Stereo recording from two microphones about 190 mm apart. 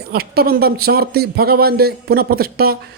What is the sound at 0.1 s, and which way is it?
Speech, 55° right (ahead or behind).